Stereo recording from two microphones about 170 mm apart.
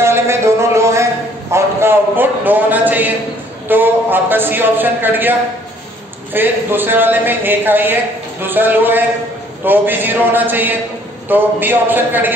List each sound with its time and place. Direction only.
0.0 s a sound: 15° right (ahead or behind)
3.6 s a man's voice: 10° right (ahead or behind)
6.3 s a man's voice: 10° right (ahead or behind)